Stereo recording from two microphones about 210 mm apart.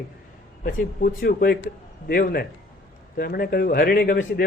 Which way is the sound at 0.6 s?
45° left (ahead or behind).